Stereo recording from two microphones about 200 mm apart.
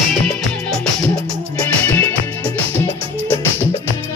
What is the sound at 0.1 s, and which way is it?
Music, centre (ahead or behind).